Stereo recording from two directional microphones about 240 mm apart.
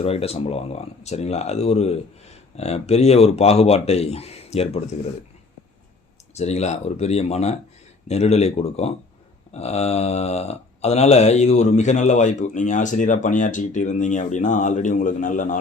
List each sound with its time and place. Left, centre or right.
0.0 s speech: left
6.3 s speech: left